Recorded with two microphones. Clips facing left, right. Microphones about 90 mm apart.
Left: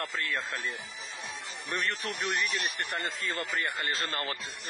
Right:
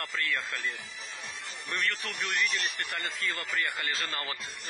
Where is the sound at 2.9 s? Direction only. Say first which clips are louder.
Left 1 dB; 40° left (ahead or behind).